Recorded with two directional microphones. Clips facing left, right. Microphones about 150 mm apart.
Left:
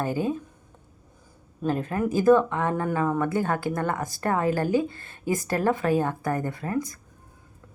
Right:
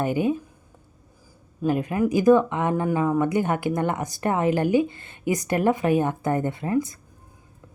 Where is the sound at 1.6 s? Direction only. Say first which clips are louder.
Right 3 dB; 15° right (ahead or behind).